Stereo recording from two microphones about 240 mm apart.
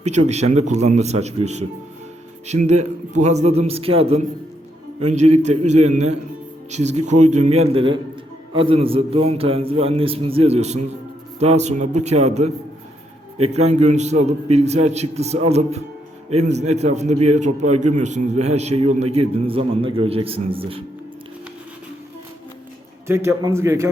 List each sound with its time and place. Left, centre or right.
0.0 s a man's voice: right
23.0 s a man's voice: centre